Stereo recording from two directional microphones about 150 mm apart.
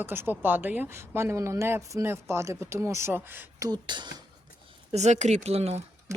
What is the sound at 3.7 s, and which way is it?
Speech, 30° right (ahead or behind).